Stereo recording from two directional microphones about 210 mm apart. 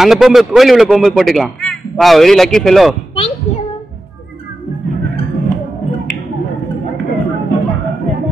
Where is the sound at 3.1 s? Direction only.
25° left (ahead or behind).